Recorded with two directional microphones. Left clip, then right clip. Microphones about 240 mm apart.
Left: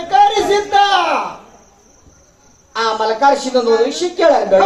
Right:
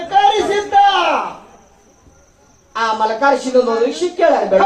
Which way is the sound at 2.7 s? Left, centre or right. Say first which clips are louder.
Even; left.